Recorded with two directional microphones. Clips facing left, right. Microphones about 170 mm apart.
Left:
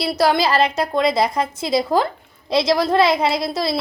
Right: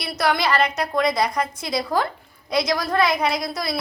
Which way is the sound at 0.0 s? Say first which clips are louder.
Left 5 dB; 30° left (ahead or behind).